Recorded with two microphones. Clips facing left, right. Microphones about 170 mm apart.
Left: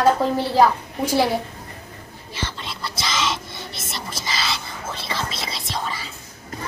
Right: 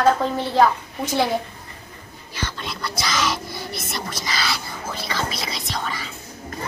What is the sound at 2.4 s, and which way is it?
Speech, 25° left (ahead or behind).